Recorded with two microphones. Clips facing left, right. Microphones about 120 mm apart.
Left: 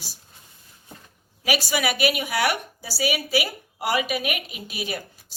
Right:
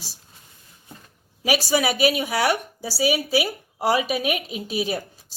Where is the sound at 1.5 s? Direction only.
30° right (ahead or behind).